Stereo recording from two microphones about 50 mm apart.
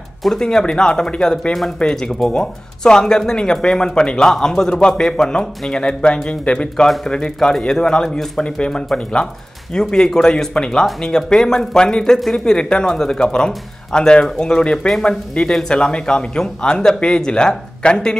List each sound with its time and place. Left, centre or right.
0.4 s speech: centre
12.5 s speech: centre